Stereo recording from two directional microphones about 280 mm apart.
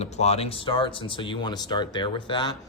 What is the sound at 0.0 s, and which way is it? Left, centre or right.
Speech, left.